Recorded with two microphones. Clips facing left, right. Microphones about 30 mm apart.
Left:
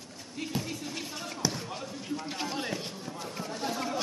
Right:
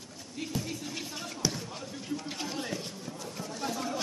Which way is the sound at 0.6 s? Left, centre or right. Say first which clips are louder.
Left 1 dB; centre.